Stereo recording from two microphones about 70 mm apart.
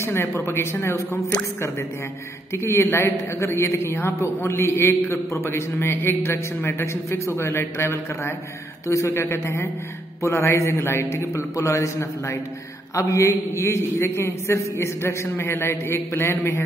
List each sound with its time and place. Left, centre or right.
0.0 s a man's voice: left